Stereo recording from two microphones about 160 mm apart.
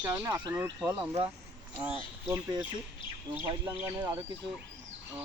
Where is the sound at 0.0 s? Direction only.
15° right (ahead or behind).